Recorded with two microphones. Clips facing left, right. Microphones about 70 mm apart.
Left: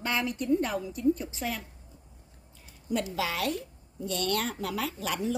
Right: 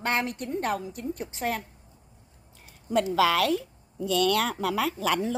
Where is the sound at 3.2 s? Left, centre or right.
Right.